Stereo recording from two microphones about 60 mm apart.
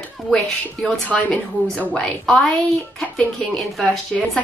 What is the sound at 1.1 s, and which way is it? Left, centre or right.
A woman's voice, centre.